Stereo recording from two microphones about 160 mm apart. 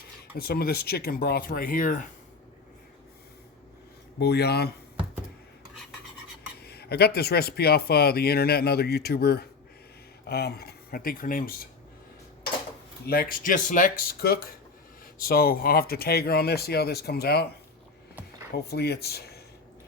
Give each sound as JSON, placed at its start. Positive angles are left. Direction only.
{"t": 0.3, "sound": "speech", "side_deg": 75}
{"t": 4.2, "sound": "speech", "side_deg": 90}
{"t": 6.6, "sound": "speech", "side_deg": 85}
{"t": 13.1, "sound": "speech", "side_deg": 70}
{"t": 18.5, "sound": "speech", "side_deg": 85}